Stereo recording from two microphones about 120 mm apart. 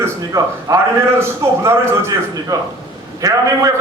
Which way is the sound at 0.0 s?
30° right (ahead or behind).